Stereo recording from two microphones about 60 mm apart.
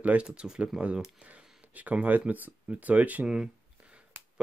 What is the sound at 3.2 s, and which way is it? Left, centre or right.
Speech, centre.